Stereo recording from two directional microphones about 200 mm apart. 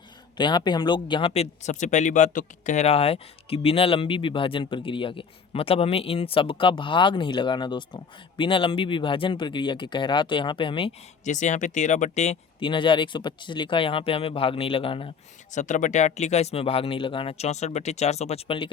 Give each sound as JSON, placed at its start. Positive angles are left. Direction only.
{"t": 0.3, "sound": "speech", "side_deg": 20}